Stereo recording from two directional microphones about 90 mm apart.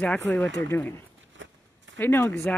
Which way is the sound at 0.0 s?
15° left (ahead or behind).